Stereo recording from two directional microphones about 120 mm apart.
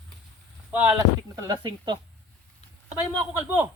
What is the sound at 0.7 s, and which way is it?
Speech, 15° right (ahead or behind).